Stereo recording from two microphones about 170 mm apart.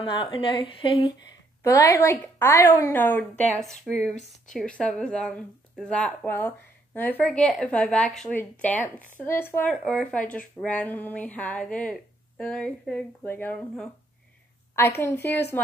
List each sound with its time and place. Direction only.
0.0 s a woman's voice: 30° left (ahead or behind)
1.6 s speech: 15° left (ahead or behind)